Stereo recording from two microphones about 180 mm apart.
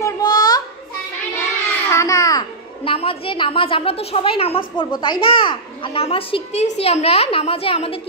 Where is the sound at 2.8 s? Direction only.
30° left (ahead or behind).